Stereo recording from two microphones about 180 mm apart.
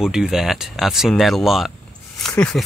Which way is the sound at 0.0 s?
5° right (ahead or behind).